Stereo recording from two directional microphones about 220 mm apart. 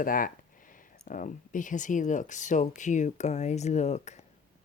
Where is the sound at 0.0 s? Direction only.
40° left (ahead or behind).